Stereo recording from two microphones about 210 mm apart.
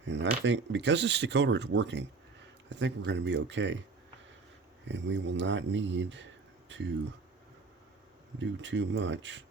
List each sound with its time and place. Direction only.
0.0 s speech: 60° right (ahead or behind)
4.9 s speech: 60° right (ahead or behind)
8.4 s speech: 60° right (ahead or behind)